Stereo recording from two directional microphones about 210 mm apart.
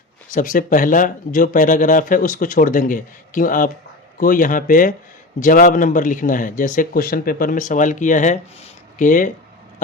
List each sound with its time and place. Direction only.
0.3 s speech: 40° left (ahead or behind)